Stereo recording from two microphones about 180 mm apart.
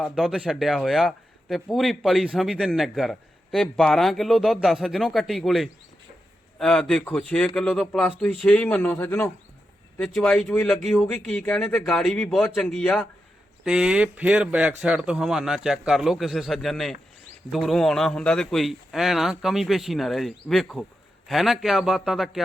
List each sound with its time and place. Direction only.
0.0 s speech: centre (ahead or behind)
13.7 s speech: 5° right (ahead or behind)